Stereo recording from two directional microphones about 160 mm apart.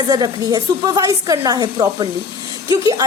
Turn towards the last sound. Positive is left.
turn(degrees=-20)  # may be behind; listen again after turning